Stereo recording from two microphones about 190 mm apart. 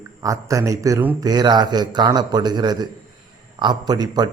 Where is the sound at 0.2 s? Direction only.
15° right (ahead or behind).